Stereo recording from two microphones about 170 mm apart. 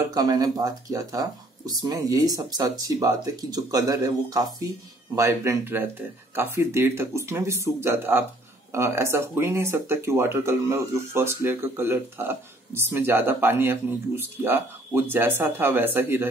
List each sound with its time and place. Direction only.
0.1 s speech: 20° right (ahead or behind)